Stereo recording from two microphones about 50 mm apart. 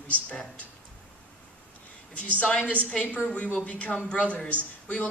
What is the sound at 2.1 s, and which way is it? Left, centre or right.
A woman's voice, left.